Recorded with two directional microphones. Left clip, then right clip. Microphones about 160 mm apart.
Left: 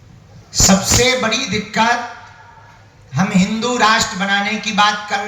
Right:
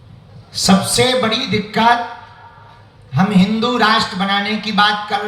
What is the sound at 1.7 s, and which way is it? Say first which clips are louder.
Speech: right 2 dB; 10° right (ahead or behind).